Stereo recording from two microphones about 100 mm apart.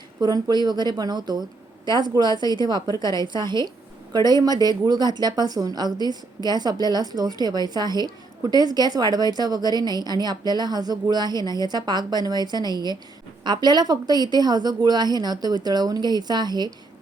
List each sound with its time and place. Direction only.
0.2 s a woman's voice: 45° right (ahead or behind)